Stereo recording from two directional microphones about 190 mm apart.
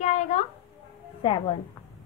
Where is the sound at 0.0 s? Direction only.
40° left (ahead or behind).